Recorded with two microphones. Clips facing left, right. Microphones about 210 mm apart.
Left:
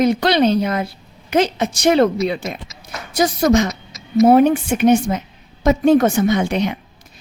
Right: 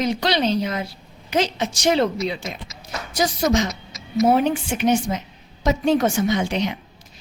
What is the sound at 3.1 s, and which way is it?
Speech, 55° left (ahead or behind).